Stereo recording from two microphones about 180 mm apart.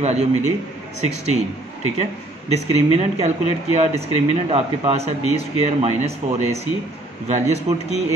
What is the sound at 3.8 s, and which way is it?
Speech, 35° right (ahead or behind).